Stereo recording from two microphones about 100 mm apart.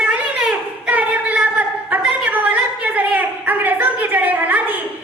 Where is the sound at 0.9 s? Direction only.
15° right (ahead or behind).